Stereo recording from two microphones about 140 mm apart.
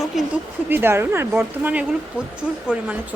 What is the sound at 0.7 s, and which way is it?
Speech, 15° right (ahead or behind).